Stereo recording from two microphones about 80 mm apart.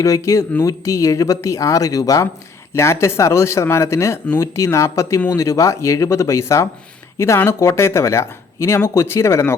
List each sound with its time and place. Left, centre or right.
0.0 s speech: left
2.7 s speech: left